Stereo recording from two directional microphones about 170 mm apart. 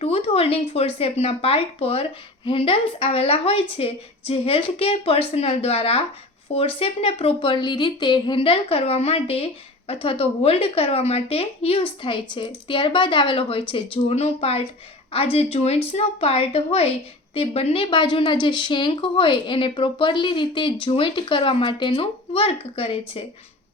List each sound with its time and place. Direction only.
0.0 s speech: 35° left (ahead or behind)